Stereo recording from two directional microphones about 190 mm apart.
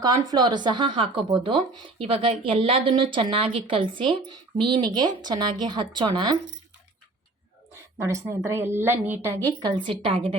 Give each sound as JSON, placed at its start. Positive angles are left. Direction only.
{"t": 0.0, "sound": "speech", "side_deg": -20}
{"t": 7.9, "sound": "a woman's voice", "side_deg": -15}
{"t": 9.6, "sound": "speech", "side_deg": -25}